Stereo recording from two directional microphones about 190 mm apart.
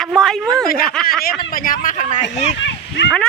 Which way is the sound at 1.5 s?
45° left (ahead or behind).